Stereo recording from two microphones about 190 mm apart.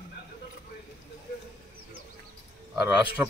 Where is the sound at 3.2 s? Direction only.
5° right (ahead or behind).